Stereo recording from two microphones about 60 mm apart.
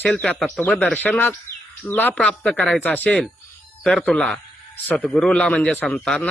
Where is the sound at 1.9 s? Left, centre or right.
Left.